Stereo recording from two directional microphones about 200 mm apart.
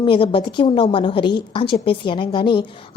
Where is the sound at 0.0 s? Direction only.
25° left (ahead or behind).